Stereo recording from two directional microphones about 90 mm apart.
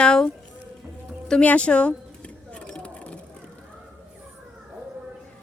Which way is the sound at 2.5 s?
15° left (ahead or behind).